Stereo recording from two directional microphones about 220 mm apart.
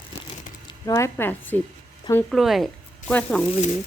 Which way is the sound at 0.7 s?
15° left (ahead or behind).